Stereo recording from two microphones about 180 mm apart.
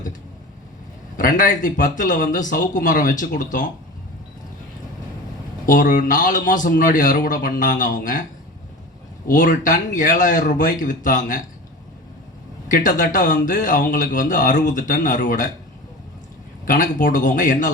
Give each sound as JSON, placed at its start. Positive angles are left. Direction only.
{"t": 1.1, "sound": "speech", "side_deg": 45}
{"t": 5.6, "sound": "speech", "side_deg": 50}
{"t": 9.2, "sound": "speech", "side_deg": 45}
{"t": 12.6, "sound": "speech", "side_deg": 45}
{"t": 16.6, "sound": "speech", "side_deg": 45}